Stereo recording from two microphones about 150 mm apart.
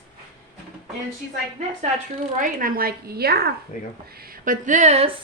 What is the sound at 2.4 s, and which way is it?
A woman's voice, 65° right (ahead or behind).